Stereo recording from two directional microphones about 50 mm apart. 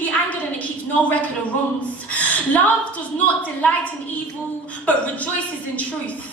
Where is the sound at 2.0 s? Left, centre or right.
Left.